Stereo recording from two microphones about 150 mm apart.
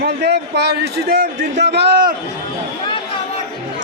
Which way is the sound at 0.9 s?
75° right (ahead or behind).